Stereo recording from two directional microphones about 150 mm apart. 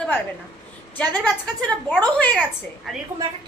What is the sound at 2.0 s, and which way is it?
Speech, 10° left (ahead or behind).